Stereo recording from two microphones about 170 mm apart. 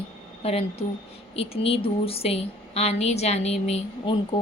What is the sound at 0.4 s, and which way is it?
A woman's voice, 35° left (ahead or behind).